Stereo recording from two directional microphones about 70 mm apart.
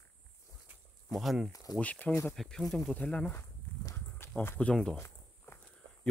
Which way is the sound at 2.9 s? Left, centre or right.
Centre.